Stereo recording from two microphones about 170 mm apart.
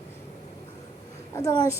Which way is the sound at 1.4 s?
20° left (ahead or behind).